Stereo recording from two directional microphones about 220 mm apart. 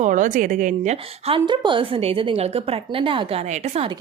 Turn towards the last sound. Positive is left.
turn(degrees=-25)  # may be behind; listen again after turning